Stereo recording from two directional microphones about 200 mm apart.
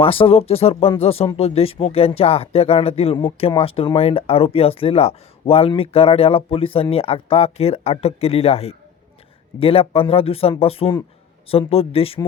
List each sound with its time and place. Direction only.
0.0 s speech: 30° left (ahead or behind)